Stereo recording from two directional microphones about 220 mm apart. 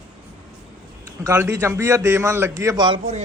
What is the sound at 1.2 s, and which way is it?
A man's voice, 15° right (ahead or behind).